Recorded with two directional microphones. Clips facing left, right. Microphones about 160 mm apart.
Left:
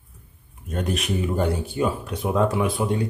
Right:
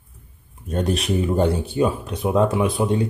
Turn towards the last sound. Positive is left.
turn(degrees=-25)  # may be behind; listen again after turning